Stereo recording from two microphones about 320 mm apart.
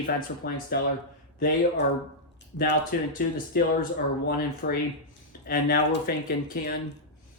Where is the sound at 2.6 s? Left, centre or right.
Left.